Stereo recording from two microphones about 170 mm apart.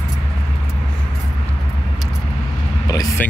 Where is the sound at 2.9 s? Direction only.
20° left (ahead or behind).